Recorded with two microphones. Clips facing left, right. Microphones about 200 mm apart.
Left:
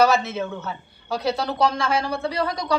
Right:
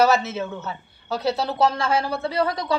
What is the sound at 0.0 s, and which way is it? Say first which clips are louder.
A man's voice: even; 5° right (ahead or behind).